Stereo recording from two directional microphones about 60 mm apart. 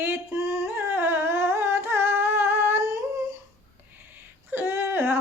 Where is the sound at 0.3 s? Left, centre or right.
Right.